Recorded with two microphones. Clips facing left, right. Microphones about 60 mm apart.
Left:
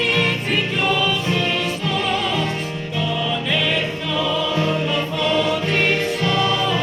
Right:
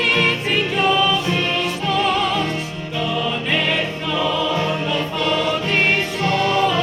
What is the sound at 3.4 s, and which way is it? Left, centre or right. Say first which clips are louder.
Music: right 1 dB; right.